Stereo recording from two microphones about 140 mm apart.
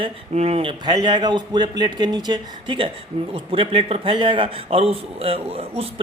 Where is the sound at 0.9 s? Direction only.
30° right (ahead or behind).